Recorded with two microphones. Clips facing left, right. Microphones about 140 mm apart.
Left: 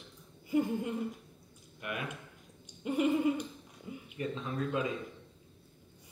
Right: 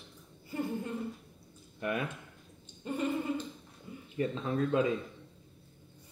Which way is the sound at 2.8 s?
10° left (ahead or behind).